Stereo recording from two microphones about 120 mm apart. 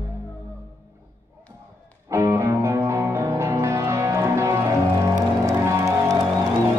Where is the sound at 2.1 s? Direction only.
25° right (ahead or behind).